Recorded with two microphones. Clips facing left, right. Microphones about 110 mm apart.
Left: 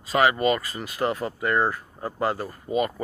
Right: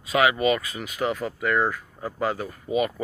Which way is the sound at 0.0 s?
Centre (ahead or behind).